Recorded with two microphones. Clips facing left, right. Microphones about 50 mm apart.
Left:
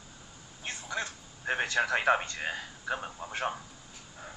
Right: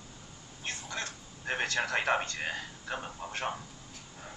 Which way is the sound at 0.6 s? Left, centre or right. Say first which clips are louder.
Left 2 dB; centre.